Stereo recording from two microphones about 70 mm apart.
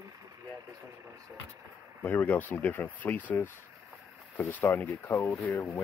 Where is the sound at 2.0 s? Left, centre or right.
Left.